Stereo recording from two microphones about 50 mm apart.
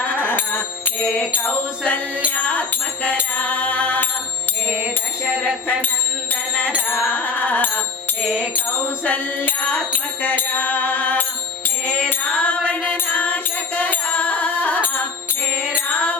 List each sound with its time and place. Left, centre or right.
0.2 s music: left
2.3 s music: left
3.2 s mantra: left
7.1 s music: left
9.0 s music: left
12.0 s mantra: left
13.1 s music: left
15.7 s mantra: left